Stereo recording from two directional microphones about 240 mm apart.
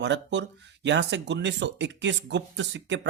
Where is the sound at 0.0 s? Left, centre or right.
Right.